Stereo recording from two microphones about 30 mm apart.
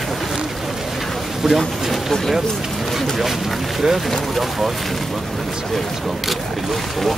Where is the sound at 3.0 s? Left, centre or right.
Centre.